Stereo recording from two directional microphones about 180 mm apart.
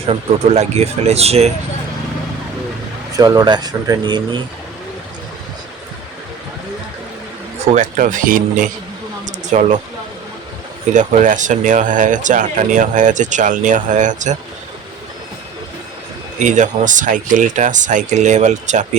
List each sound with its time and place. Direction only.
0.1 s speech: 35° right (ahead or behind)
3.2 s speech: 20° right (ahead or behind)
7.7 s speech: 45° right (ahead or behind)
9.2 s a sound: 40° right (ahead or behind)
10.9 s speech: 45° right (ahead or behind)
16.4 s speech: 45° right (ahead or behind)